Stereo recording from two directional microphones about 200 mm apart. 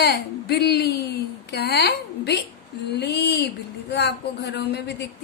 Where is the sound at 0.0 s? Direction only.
55° left (ahead or behind).